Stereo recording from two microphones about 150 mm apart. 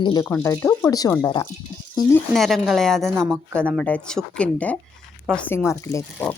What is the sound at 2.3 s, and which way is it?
A woman's voice, centre (ahead or behind).